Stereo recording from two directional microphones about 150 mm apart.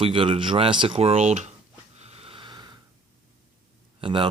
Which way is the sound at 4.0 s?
35° right (ahead or behind).